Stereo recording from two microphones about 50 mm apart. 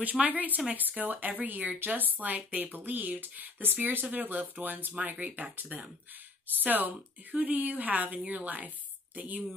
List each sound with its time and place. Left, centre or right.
0.0 s speech: right